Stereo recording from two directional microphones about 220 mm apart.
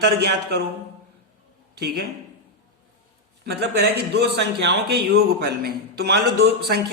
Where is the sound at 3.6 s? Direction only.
50° right (ahead or behind).